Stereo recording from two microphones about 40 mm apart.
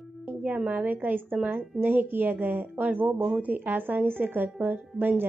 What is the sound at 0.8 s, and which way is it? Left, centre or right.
A woman's voice, right.